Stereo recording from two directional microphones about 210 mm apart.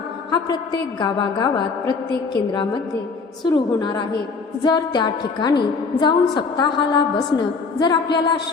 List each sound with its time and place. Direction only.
0.3 s a woman's voice: 20° left (ahead or behind)